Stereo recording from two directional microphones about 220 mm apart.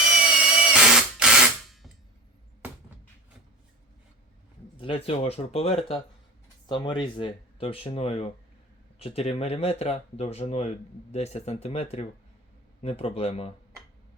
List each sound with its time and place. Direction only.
0.3 s tools: 5° right (ahead or behind)
4.8 s speech: 25° left (ahead or behind)